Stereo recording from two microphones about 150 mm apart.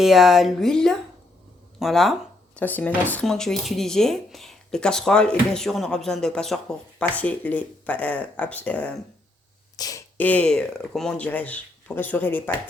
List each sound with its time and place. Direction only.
0.0 s speech: centre (ahead or behind)
2.6 s speech: 10° left (ahead or behind)
9.7 s speech: 25° left (ahead or behind)
10.2 s speech: 10° left (ahead or behind)